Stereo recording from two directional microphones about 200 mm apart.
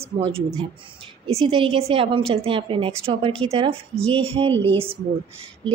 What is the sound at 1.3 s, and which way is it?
Speech, 30° right (ahead or behind).